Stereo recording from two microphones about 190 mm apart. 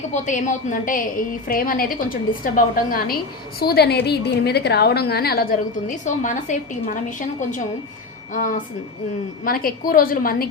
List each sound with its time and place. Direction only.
0.1 s a woman's voice: 40° left (ahead or behind)
6.1 s a woman's voice: 40° left (ahead or behind)